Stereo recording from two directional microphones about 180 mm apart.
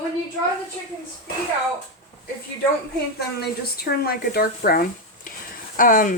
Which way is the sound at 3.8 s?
60° left (ahead or behind).